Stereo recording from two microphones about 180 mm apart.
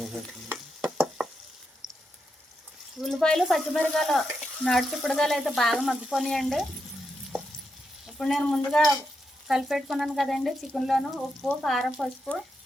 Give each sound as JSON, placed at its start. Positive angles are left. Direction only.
{"t": 0.8, "sound": "stir", "side_deg": 0}
{"t": 1.8, "sound": "a sound", "side_deg": -25}
{"t": 3.0, "sound": "speech", "side_deg": 0}
{"t": 8.0, "sound": "speech", "side_deg": 0}